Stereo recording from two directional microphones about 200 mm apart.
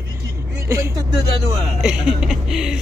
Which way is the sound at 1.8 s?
5° right (ahead or behind).